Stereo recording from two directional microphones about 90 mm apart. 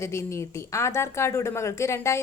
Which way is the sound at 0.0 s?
30° left (ahead or behind).